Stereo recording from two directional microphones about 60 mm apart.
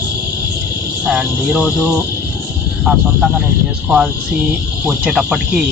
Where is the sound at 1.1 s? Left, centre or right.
Right.